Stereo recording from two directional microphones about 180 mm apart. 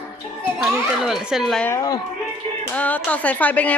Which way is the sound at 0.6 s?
Centre (ahead or behind).